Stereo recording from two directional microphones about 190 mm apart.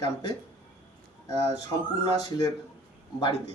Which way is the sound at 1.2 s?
15° left (ahead or behind).